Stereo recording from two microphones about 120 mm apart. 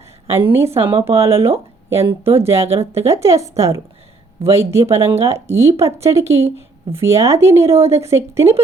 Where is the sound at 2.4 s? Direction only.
60° right (ahead or behind).